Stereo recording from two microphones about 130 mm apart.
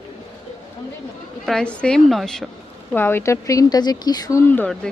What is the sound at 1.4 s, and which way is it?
A woman's voice, 5° left (ahead or behind).